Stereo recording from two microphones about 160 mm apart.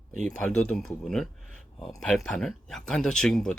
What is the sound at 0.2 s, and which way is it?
Speech, 5° left (ahead or behind).